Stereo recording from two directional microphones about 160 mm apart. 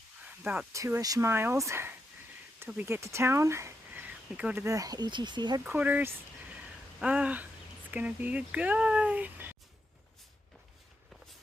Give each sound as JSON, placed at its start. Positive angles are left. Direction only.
{"t": 0.3, "sound": "speech", "side_deg": -10}
{"t": 5.6, "sound": "speech", "side_deg": -10}